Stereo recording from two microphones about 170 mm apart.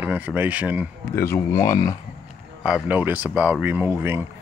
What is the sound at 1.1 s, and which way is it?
Speech, 15° left (ahead or behind).